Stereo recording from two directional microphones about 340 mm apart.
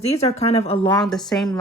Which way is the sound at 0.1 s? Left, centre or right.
Centre.